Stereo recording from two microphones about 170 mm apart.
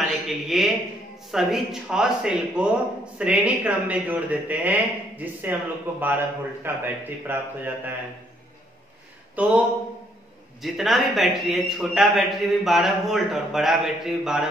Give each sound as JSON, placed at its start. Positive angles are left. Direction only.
{"t": 0.5, "sound": "a man's voice", "side_deg": 0}
{"t": 9.3, "sound": "a man's voice", "side_deg": -10}